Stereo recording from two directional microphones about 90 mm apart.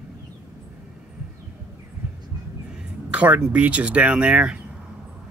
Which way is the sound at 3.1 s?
15° right (ahead or behind).